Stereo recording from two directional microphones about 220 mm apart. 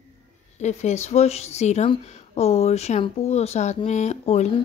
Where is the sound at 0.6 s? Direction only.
30° left (ahead or behind).